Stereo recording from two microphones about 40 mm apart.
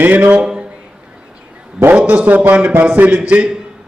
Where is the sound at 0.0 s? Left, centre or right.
Right.